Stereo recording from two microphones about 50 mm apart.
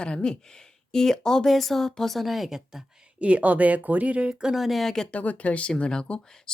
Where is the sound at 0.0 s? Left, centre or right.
Centre.